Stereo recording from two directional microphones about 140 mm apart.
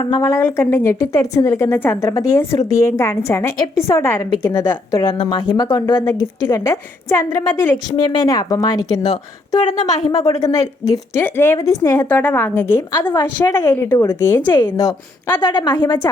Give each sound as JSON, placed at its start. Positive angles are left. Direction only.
{"t": 0.0, "sound": "a woman's voice", "side_deg": 25}
{"t": 15.4, "sound": "a woman's voice", "side_deg": 30}